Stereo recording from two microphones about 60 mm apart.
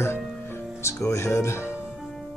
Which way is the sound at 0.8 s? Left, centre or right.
Left.